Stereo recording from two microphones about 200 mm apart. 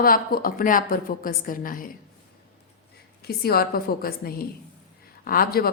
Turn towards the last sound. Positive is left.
turn(degrees=50)  # may be behind; listen again after turning